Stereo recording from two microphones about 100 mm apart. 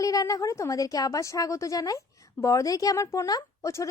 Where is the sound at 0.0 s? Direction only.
35° left (ahead or behind).